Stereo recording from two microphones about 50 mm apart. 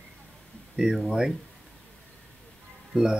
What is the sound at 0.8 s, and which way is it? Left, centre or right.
Speech, centre.